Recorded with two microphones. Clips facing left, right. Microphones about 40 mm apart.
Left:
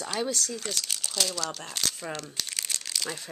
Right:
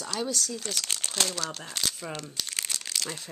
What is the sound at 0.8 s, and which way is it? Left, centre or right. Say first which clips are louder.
Speech: right 3 dB; right.